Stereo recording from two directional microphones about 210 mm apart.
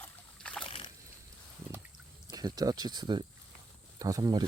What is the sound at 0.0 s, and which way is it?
Boat, 5° left (ahead or behind).